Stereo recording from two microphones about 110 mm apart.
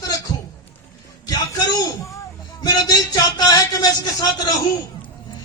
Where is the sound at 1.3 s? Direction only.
35° left (ahead or behind).